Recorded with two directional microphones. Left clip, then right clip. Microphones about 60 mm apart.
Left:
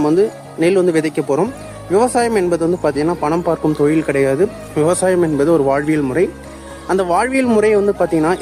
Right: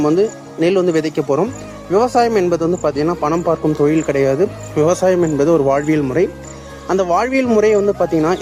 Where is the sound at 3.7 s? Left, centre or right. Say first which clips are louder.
Even; left.